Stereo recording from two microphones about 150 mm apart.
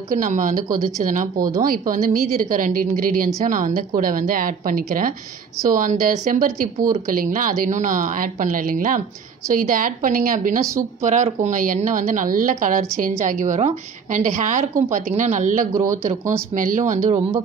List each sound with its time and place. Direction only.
0.1 s a woman's voice: 60° right (ahead or behind)
3.4 s a woman's voice: 60° right (ahead or behind)